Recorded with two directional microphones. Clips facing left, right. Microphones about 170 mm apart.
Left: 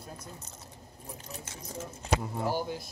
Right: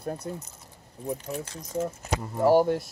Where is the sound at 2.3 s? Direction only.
70° right (ahead or behind).